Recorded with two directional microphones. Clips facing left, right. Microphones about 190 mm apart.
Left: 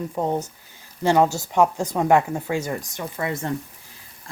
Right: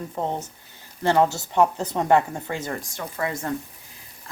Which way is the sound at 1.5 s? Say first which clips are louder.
Left 1 dB; 15° left (ahead or behind).